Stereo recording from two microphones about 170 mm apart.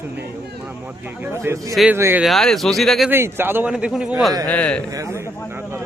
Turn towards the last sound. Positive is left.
turn(degrees=-15)  # may be behind; listen again after turning